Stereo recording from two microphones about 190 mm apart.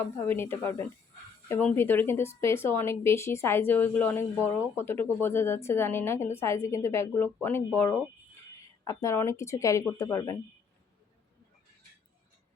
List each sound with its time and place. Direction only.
0.0 s speech: 10° left (ahead or behind)